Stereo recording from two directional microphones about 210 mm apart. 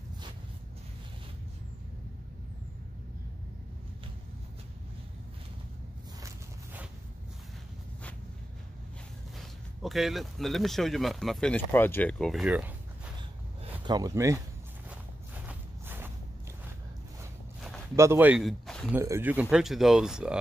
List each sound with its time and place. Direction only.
6.2 s a sound: 10° right (ahead or behind)
9.4 s speech: centre (ahead or behind)
13.8 s speech: 15° right (ahead or behind)
14.9 s walk: 5° right (ahead or behind)
17.9 s speech: 10° right (ahead or behind)
18.9 s speech: 10° right (ahead or behind)